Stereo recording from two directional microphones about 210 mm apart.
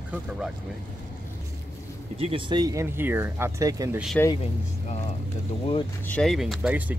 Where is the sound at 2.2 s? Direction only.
25° right (ahead or behind).